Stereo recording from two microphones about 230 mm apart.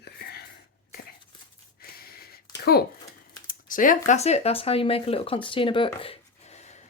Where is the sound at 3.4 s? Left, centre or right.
Left.